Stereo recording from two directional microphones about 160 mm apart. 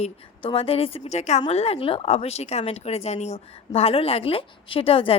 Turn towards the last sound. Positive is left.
turn(degrees=35)  # may be behind; listen again after turning